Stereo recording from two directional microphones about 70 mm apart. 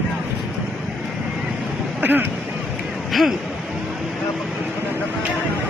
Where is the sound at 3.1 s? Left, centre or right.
Centre.